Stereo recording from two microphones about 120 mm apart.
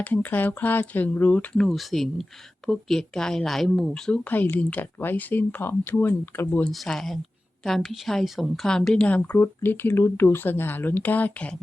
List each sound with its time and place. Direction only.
0.0 s a woman's voice: 15° left (ahead or behind)
4.2 s a woman's voice: 15° left (ahead or behind)
6.7 s a woman's voice: 5° left (ahead or behind)